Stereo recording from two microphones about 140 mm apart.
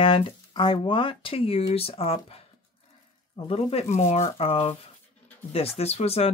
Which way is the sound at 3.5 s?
45° left (ahead or behind).